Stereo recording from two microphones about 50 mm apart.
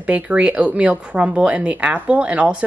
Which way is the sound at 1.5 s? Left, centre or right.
Right.